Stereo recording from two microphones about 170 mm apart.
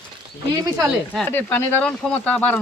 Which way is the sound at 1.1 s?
10° left (ahead or behind).